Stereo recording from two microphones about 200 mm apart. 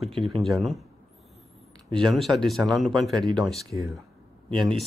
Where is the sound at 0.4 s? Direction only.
Centre (ahead or behind).